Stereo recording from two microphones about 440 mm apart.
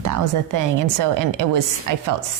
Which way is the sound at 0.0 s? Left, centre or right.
Right.